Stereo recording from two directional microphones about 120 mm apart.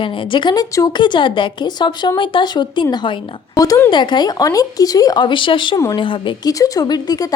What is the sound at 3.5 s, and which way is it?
Speech, 30° left (ahead or behind).